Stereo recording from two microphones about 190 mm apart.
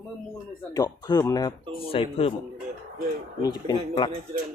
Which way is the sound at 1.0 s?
20° left (ahead or behind).